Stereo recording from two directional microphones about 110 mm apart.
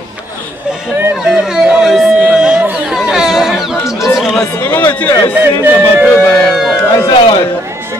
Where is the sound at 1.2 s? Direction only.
5° right (ahead or behind).